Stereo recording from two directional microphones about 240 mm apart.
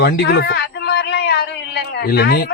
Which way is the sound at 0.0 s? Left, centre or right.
Left.